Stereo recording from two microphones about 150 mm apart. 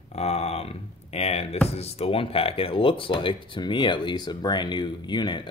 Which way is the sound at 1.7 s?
45° left (ahead or behind).